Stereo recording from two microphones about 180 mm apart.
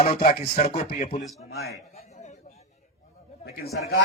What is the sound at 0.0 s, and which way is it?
Speech, 35° left (ahead or behind).